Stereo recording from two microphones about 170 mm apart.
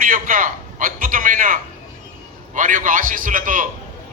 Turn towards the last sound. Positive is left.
turn(degrees=-50)  # may be behind; listen again after turning